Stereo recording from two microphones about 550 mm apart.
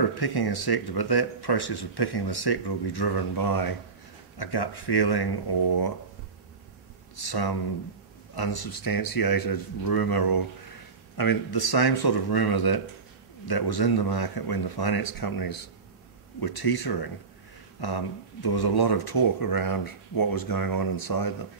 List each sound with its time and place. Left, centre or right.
0.1 s speech: left
7.2 s a man's voice: left